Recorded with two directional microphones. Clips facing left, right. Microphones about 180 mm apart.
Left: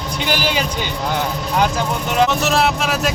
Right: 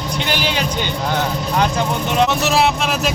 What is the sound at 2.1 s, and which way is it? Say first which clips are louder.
Speech: even; centre (ahead or behind).